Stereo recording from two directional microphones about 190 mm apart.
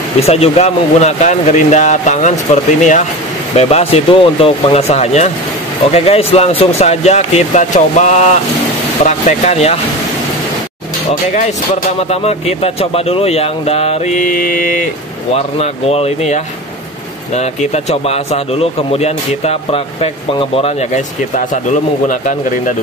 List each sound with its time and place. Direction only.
0.2 s speech: 35° left (ahead or behind)
12.0 s speech: 35° left (ahead or behind)
15.3 s speech: 30° left (ahead or behind)
17.4 s speech: 35° left (ahead or behind)
21.4 s a man's voice: 40° left (ahead or behind)